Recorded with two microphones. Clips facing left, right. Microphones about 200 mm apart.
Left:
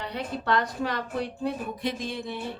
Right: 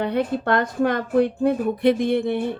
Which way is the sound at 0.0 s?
55° right (ahead or behind).